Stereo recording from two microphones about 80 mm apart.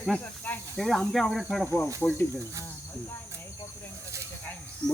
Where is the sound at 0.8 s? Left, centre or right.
Centre.